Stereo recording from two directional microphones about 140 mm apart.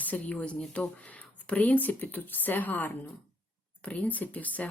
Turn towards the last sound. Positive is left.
turn(degrees=10)  # may be behind; listen again after turning